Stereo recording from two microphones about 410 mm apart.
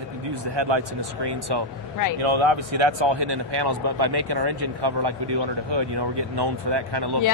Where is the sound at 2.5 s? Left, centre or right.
Right.